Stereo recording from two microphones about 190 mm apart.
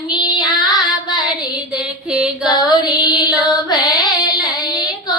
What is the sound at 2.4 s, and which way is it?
Female singing, 20° left (ahead or behind).